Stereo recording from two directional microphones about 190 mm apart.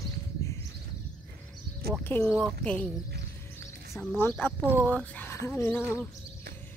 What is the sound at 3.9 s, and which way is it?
Speech, 5° left (ahead or behind).